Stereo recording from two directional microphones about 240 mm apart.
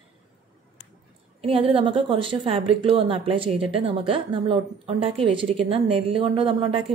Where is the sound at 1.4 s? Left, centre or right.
Right.